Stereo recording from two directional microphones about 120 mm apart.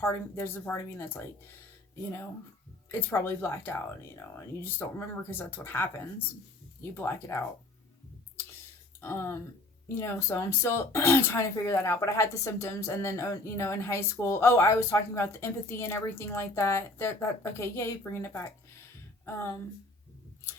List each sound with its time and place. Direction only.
0.0 s speech: 20° left (ahead or behind)
2.9 s speech: 20° left (ahead or behind)
9.0 s speech: 20° left (ahead or behind)